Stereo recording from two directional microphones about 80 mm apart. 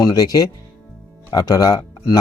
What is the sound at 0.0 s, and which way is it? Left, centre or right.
Speech, left.